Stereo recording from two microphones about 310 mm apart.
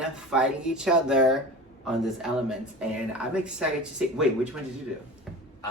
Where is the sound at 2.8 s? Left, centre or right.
Centre.